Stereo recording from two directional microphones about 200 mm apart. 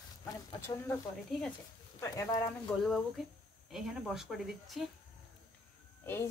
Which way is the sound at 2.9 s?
Centre (ahead or behind).